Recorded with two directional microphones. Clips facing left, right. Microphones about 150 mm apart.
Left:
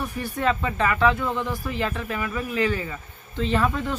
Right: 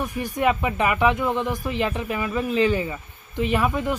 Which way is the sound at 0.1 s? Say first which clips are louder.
Right 2 dB; 15° right (ahead or behind).